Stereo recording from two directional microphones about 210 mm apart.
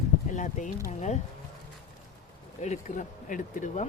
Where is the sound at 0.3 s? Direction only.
35° left (ahead or behind).